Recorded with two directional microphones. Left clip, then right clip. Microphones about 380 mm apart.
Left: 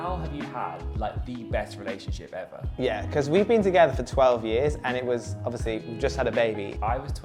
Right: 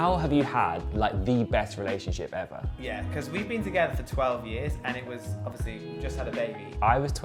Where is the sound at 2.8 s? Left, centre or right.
Left.